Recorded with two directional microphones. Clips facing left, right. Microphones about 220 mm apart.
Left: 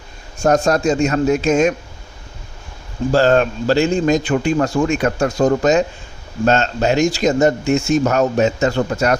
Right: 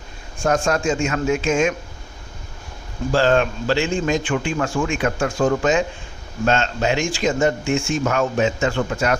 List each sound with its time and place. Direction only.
0.4 s speech: 40° left (ahead or behind)
3.1 s speech: 40° left (ahead or behind)